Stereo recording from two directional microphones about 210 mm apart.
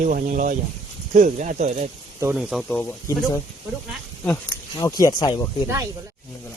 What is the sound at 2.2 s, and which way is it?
Speech, centre (ahead or behind).